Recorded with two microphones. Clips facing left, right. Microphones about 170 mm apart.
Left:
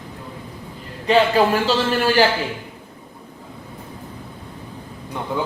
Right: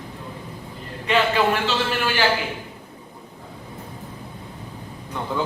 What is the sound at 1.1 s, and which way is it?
A man's voice, 40° left (ahead or behind).